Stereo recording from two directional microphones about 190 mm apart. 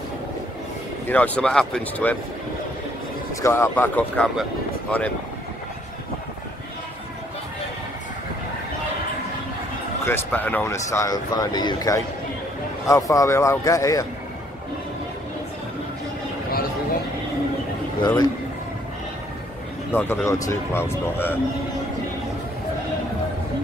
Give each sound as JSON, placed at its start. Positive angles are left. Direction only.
{"t": 1.0, "sound": "speech", "side_deg": 10}
{"t": 3.4, "sound": "speech", "side_deg": 15}
{"t": 10.0, "sound": "speech", "side_deg": 10}
{"t": 18.0, "sound": "a man's voice", "side_deg": 20}
{"t": 19.9, "sound": "speech", "side_deg": 10}